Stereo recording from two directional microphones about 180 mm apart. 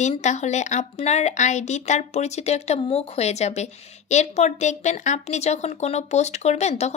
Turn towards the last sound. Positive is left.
turn(degrees=40)  # may be behind; listen again after turning